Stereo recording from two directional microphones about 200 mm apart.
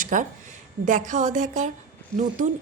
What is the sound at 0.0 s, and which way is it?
A woman's voice, 40° right (ahead or behind).